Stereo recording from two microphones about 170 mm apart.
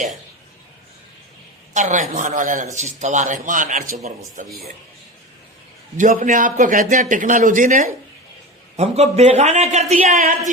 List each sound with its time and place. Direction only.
1.7 s speech: 45° right (ahead or behind)
4.4 s speech: centre (ahead or behind)
6.0 s a man's voice: 50° right (ahead or behind)